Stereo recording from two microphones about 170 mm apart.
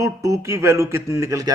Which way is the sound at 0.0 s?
20° right (ahead or behind).